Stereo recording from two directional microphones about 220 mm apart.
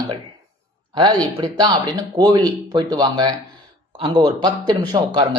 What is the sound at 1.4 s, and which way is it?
Speech, 20° right (ahead or behind).